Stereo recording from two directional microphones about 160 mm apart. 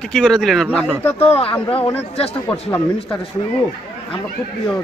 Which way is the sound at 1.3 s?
35° left (ahead or behind).